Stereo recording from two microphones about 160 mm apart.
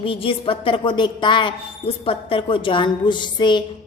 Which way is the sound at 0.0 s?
35° left (ahead or behind).